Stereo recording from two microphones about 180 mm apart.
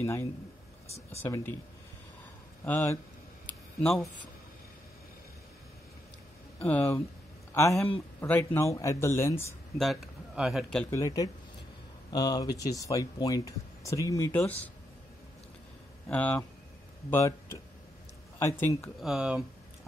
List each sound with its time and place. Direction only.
0.0 s speech: 15° left (ahead or behind)
2.6 s speech: 10° left (ahead or behind)
6.6 s speech: 10° left (ahead or behind)
9.8 s speech: centre (ahead or behind)
11.0 s speech: 20° left (ahead or behind)
16.1 s speech: 5° left (ahead or behind)
18.9 s speech: 5° right (ahead or behind)